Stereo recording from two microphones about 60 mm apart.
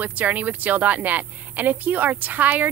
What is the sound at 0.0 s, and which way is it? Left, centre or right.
A woman's voice, right.